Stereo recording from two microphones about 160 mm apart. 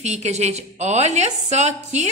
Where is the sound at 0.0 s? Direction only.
45° right (ahead or behind).